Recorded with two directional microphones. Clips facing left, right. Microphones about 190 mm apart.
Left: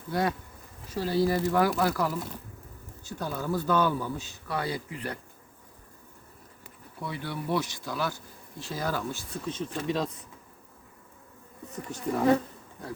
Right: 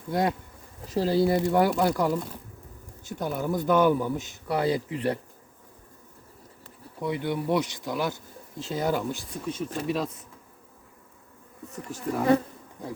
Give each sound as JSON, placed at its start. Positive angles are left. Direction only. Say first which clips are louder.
{"t": 0.1, "sound": "speech", "louder": "right 2 dB", "side_deg": -20}
{"t": 7.0, "sound": "speech", "louder": "right 7 dB", "side_deg": -20}
{"t": 11.7, "sound": "speech", "louder": "even", "side_deg": 0}